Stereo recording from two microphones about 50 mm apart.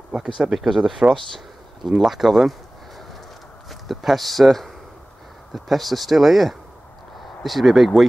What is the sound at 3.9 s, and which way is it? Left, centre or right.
Speech, centre.